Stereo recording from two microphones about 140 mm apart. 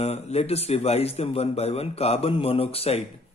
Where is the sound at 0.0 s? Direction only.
50° left (ahead or behind).